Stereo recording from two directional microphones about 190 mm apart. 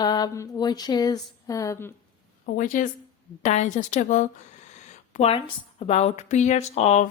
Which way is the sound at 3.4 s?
40° left (ahead or behind).